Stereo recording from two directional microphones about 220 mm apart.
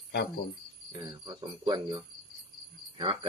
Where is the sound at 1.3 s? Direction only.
20° right (ahead or behind).